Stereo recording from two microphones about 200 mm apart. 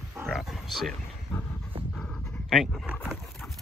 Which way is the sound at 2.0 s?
Centre (ahead or behind).